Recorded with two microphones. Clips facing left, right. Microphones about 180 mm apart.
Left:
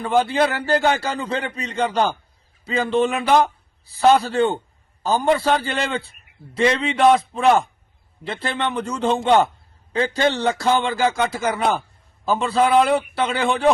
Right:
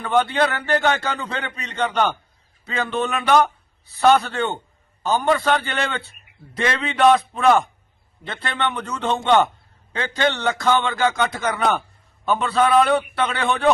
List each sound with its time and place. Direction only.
0.3 s a man's voice: 30° left (ahead or behind)